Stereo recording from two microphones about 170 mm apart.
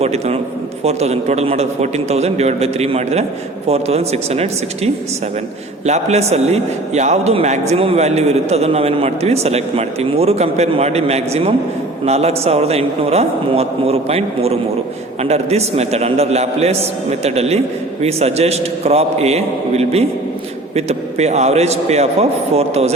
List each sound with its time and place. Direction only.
0.0 s a man's voice: 40° right (ahead or behind)